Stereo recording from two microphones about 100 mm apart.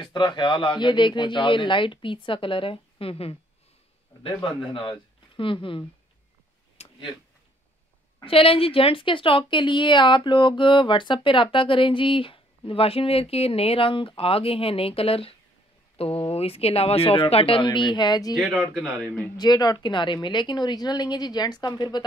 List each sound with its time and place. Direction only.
0.0 s a woman's voice: 50° left (ahead or behind); by 3.3 s 75° left (ahead or behind)
4.2 s a woman's voice: 55° left (ahead or behind)
6.8 s a sound: 90° left
8.2 s a woman's voice: 65° left (ahead or behind); by 18.3 s 45° left (ahead or behind)
18.3 s speech: centre (ahead or behind)
19.3 s a woman's voice: 45° left (ahead or behind)